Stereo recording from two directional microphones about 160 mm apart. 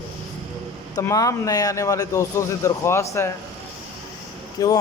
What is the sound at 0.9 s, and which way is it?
Speech, 20° left (ahead or behind).